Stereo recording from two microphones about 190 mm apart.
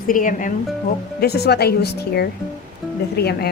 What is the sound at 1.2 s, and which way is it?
Speech, 60° left (ahead or behind).